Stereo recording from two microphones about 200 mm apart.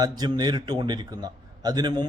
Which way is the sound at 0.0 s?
20° right (ahead or behind).